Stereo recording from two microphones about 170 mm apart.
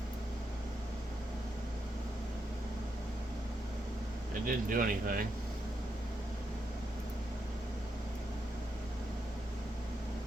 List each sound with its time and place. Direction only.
4.4 s speech: 55° right (ahead or behind)